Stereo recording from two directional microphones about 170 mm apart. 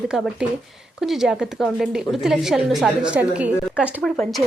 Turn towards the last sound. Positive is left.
turn(degrees=5)  # may be behind; listen again after turning